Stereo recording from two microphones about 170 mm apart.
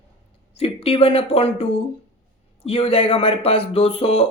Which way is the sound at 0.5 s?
35° left (ahead or behind).